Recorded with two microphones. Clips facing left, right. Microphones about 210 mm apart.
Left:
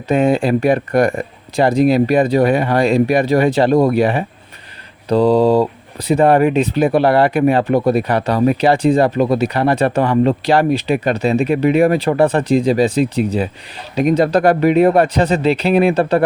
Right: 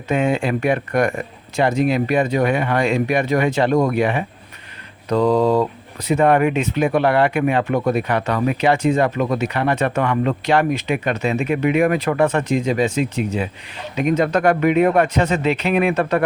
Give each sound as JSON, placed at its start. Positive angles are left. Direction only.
{"t": 0.1, "sound": "speech", "side_deg": 35}